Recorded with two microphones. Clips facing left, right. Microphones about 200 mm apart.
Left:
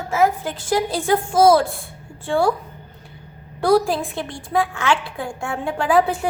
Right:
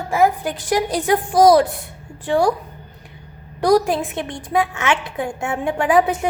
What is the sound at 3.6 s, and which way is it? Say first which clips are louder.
A woman's voice: right 1 dB; 20° right (ahead or behind).